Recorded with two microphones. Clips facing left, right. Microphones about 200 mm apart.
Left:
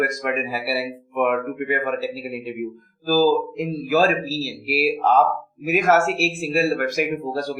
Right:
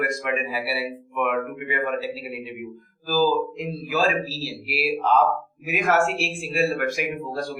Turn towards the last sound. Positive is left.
turn(degrees=40)  # may be behind; listen again after turning